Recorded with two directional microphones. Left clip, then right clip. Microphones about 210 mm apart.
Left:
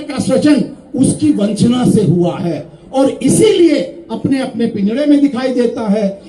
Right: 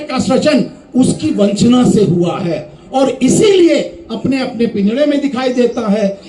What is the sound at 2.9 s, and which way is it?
A man's voice, 35° right (ahead or behind).